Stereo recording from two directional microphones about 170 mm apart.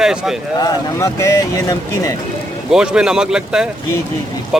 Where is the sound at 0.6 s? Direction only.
20° left (ahead or behind).